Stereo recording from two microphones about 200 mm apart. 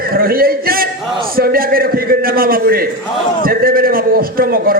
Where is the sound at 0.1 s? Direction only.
45° right (ahead or behind).